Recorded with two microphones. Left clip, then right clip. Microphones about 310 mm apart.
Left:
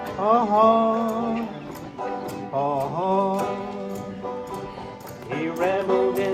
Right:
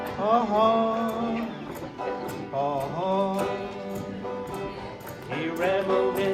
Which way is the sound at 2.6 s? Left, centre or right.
Left.